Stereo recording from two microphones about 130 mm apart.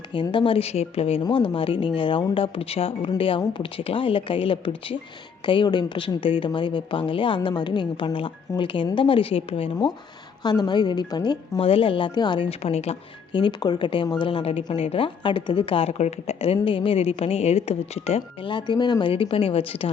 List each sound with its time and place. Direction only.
0.1 s speech: 40° left (ahead or behind)
1.2 s a woman's voice: 40° left (ahead or behind)
10.4 s a woman's voice: 35° left (ahead or behind)
11.6 s speech: 45° left (ahead or behind)
13.3 s speech: 35° left (ahead or behind); by 18.5 s 55° left (ahead or behind)
18.5 s speech: 35° left (ahead or behind)